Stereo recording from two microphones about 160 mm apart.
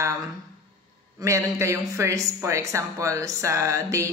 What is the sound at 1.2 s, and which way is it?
A woman's voice, 20° right (ahead or behind).